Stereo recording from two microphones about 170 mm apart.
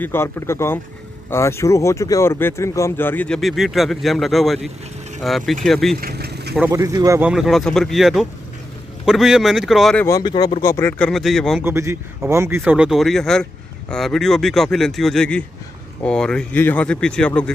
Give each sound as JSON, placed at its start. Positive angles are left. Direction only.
{"t": 0.0, "sound": "speech", "side_deg": 15}
{"t": 5.9, "sound": "vehicle", "side_deg": -65}
{"t": 6.7, "sound": "speech", "side_deg": -20}
{"t": 7.2, "sound": "speech", "side_deg": -5}
{"t": 10.0, "sound": "speech", "side_deg": 20}
{"t": 11.6, "sound": "a man's voice", "side_deg": -15}